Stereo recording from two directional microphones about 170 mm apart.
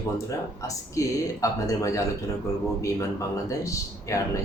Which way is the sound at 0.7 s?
20° left (ahead or behind).